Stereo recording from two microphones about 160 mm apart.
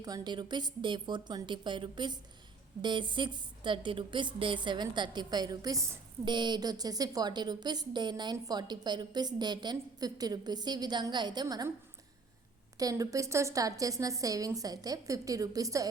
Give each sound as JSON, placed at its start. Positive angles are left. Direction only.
{"t": 0.0, "sound": "a woman's voice", "side_deg": -25}
{"t": 12.7, "sound": "a woman's voice", "side_deg": -20}